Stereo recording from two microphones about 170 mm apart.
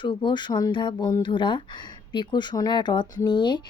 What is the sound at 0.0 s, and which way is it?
A woman's voice, 30° left (ahead or behind).